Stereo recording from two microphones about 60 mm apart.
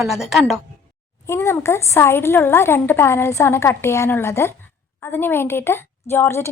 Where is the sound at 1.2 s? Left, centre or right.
Left.